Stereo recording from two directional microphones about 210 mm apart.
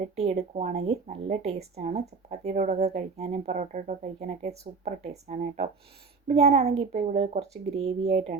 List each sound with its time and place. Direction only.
0.2 s speech: 30° right (ahead or behind)